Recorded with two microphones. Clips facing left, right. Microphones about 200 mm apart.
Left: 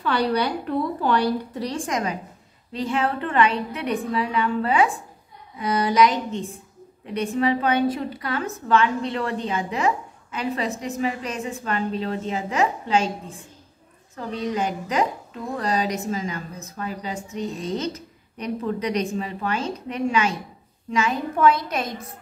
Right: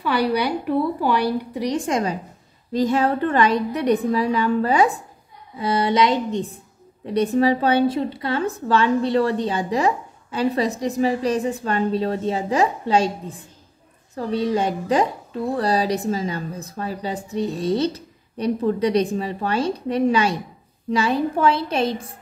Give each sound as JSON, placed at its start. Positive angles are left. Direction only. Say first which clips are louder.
{"t": 0.0, "sound": "a woman's voice", "louder": "right 2 dB", "side_deg": -10}
{"t": 1.9, "sound": "a woman's voice", "louder": "right 4 dB", "side_deg": -30}
{"t": 5.6, "sound": "a woman's voice", "louder": "even", "side_deg": -30}
{"t": 14.1, "sound": "a woman's voice", "louder": "right 5 dB", "side_deg": -35}